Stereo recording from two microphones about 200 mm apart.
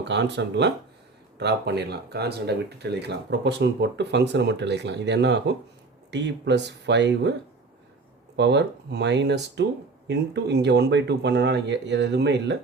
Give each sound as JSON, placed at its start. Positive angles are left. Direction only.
{"t": 0.0, "sound": "speech", "side_deg": -60}
{"t": 8.4, "sound": "speech", "side_deg": -60}